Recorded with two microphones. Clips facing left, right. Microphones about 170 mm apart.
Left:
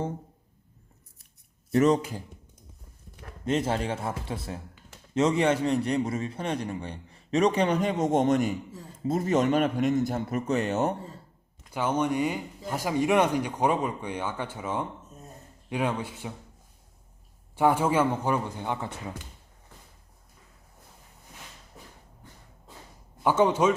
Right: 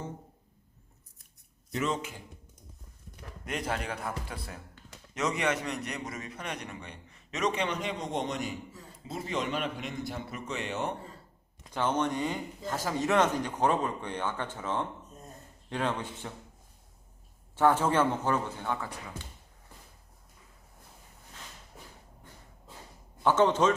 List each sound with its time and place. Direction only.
1.7 s a man's voice: 40° left (ahead or behind)
3.4 s a man's voice: 25° left (ahead or behind); by 10.9 s 45° left (ahead or behind)
11.7 s speech: 10° left (ahead or behind)
17.5 s speech: 10° left (ahead or behind)
23.2 s speech: 10° left (ahead or behind)